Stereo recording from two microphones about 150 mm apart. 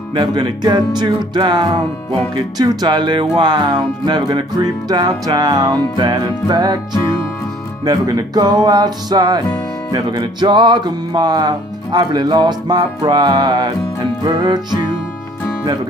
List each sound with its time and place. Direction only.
0.1 s music: 30° right (ahead or behind)